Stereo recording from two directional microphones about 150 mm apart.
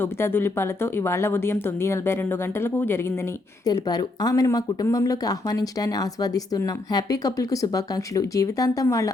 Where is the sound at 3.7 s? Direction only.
25° left (ahead or behind).